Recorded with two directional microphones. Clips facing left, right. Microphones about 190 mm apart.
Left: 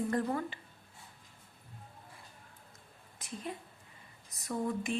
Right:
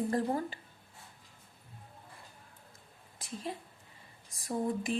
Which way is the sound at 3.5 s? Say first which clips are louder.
Right 1 dB; 30° right (ahead or behind).